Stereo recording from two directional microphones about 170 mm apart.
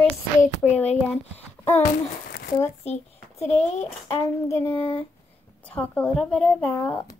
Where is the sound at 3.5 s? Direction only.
40° left (ahead or behind).